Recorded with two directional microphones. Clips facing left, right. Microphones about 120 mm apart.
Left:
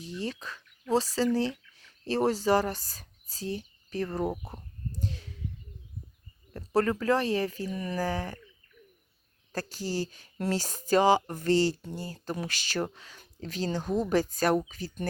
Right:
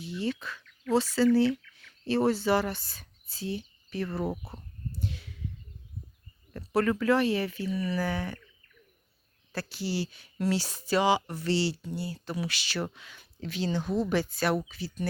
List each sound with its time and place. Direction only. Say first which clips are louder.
0.0 s speech: right 3 dB; 35° left (ahead or behind)
4.2 s speech: left 1 dB; 15° left (ahead or behind)
4.9 s a sound: even; 35° left (ahead or behind)
7.0 s speech: right 1 dB; 40° left (ahead or behind)
9.5 s speech: even; 40° left (ahead or behind)